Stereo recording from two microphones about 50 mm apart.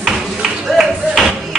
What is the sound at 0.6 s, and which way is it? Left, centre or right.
Music, centre.